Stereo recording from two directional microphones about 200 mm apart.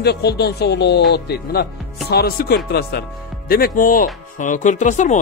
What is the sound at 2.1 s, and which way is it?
Speech, 50° left (ahead or behind).